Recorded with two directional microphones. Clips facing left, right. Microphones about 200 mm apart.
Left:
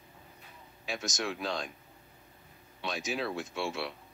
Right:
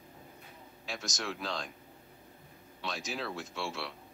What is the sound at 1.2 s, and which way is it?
Speech, 15° left (ahead or behind).